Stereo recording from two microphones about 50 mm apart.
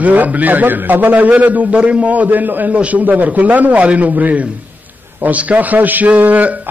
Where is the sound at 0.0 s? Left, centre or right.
Right.